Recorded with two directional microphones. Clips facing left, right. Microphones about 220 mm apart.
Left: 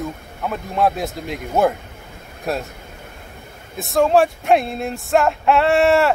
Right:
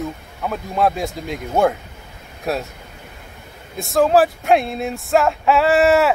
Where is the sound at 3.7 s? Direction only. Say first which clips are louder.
Right 1 dB; centre (ahead or behind).